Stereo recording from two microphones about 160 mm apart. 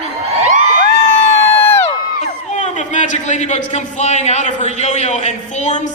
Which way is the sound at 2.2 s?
45° left (ahead or behind).